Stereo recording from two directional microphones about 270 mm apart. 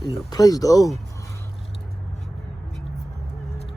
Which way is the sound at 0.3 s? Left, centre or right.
Centre.